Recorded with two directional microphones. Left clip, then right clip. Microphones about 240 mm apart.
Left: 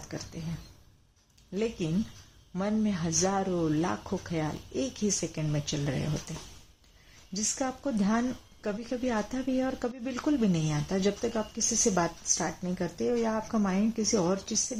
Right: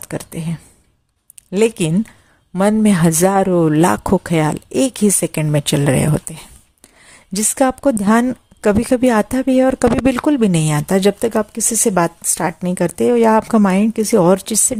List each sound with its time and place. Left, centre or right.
0.1 s speech: right
2.6 s speech: right
7.3 s speech: right